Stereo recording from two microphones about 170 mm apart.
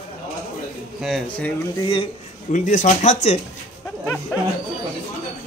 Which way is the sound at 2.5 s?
45° left (ahead or behind).